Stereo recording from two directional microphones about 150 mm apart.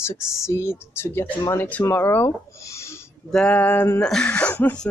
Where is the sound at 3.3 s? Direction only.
5° left (ahead or behind).